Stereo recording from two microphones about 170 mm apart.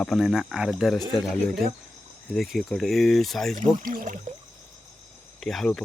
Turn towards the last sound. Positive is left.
turn(degrees=5)  # may be behind; listen again after turning